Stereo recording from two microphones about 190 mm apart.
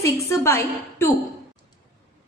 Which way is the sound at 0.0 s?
15° left (ahead or behind).